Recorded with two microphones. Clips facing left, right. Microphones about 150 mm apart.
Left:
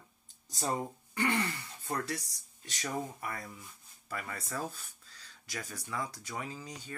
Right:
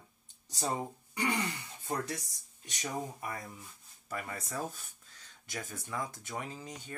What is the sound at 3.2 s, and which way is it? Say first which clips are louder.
Speech: even; 20° right (ahead or behind).